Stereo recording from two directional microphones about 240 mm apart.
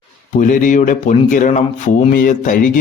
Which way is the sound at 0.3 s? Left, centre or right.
Left.